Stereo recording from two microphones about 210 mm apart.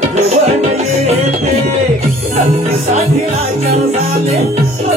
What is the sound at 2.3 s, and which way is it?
Music, 30° right (ahead or behind).